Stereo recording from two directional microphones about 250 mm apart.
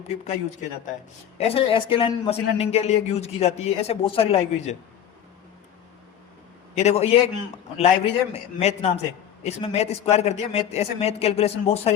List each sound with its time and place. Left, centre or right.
1.4 s a man's voice: left
6.7 s a man's voice: left